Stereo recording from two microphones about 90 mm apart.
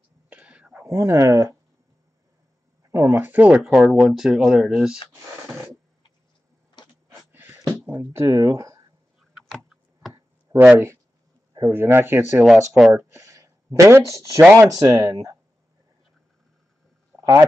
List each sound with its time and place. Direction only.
0.3 s whispering: 15° right (ahead or behind)
0.8 s speech: 35° right (ahead or behind)
2.9 s speech: 35° right (ahead or behind)
3.3 s speech: 20° right (ahead or behind)
3.5 s speech: centre (ahead or behind)
6.8 s a sound: 50° left (ahead or behind)
7.7 s speech: 25° right (ahead or behind)
10.5 s a sound: 40° right (ahead or behind)
11.6 s speech: 25° right (ahead or behind)
12.4 s speech: centre (ahead or behind)
13.1 s speech: 35° right (ahead or behind)
17.2 s a sound: 40° right (ahead or behind)